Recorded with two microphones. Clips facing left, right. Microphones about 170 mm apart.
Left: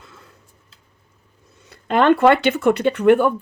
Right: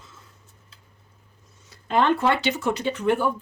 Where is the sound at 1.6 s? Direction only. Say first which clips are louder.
Left 6 dB; 60° left (ahead or behind).